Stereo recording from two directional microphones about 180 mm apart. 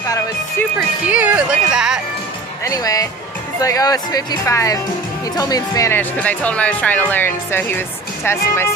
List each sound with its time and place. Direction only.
0.8 s speech: 10° right (ahead or behind)
2.6 s speech: 20° left (ahead or behind)